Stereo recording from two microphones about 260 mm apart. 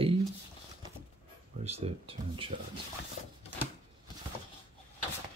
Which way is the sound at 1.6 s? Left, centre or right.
Right.